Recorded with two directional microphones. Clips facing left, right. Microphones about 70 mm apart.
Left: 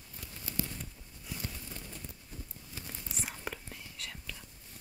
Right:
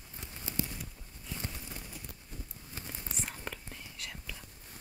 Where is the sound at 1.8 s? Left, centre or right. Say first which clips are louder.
Even; centre.